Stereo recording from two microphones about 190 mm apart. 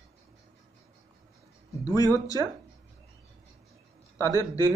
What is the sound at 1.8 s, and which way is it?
Speech, 20° left (ahead or behind).